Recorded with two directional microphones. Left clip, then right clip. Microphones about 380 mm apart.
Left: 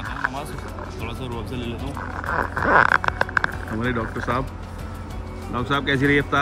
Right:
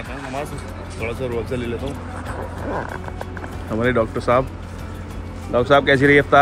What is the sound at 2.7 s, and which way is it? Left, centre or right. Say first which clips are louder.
Vehicle: left 13 dB; right.